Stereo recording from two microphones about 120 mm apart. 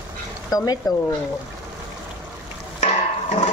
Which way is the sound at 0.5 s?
35° left (ahead or behind).